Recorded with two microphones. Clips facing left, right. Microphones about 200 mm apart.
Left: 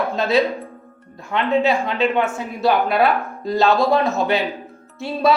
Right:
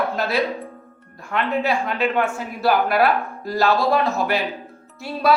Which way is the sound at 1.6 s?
25° left (ahead or behind).